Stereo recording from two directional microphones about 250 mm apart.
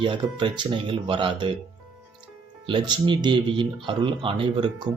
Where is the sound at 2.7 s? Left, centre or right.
Centre.